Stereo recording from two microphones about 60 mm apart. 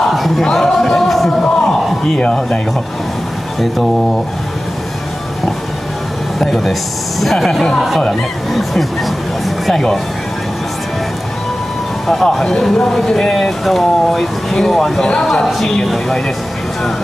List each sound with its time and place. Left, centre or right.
0.0 s a sound: centre
2.2 s speech: centre
6.4 s speech: centre
9.7 s speech: centre
12.1 s speech: centre